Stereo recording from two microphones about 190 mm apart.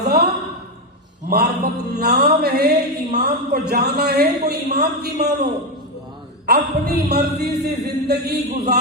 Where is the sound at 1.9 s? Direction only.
55° right (ahead or behind).